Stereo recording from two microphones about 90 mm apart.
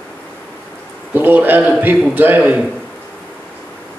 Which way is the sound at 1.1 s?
20° right (ahead or behind).